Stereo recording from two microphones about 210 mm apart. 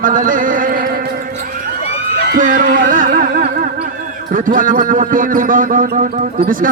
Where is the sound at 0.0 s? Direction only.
40° right (ahead or behind).